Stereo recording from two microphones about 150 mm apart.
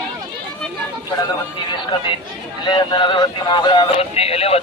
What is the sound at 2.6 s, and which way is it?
Speech, 30° left (ahead or behind).